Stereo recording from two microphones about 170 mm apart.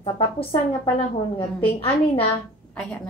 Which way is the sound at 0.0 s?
35° left (ahead or behind).